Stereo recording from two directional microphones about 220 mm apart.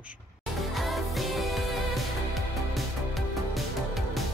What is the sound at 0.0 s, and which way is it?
Music, 5° right (ahead or behind).